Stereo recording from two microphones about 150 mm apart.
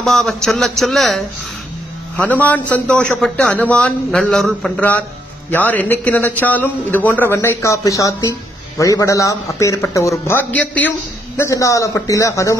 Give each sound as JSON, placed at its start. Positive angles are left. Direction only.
{"t": 0.0, "sound": "a man's voice", "side_deg": 0}